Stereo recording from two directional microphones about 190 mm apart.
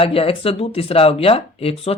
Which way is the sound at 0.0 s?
30° left (ahead or behind).